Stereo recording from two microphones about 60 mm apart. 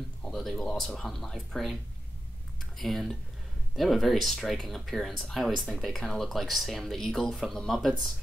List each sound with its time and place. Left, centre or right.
0.3 s speech: centre